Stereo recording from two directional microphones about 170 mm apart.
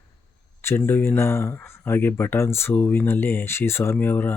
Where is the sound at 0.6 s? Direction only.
15° left (ahead or behind).